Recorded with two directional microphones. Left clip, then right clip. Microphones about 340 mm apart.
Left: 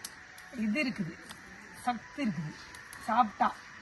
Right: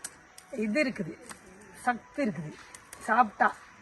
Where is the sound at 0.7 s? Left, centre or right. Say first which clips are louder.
Right 4 dB; centre.